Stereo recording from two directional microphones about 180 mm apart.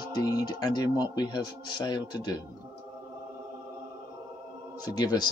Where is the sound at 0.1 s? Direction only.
20° left (ahead or behind).